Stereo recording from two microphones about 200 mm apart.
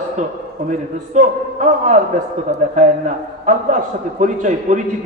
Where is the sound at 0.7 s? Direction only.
40° right (ahead or behind).